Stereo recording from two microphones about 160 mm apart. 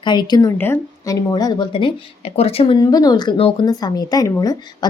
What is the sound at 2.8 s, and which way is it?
A woman's voice, 25° left (ahead or behind).